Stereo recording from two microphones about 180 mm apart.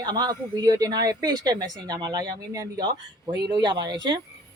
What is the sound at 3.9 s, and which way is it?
Speech, 80° right.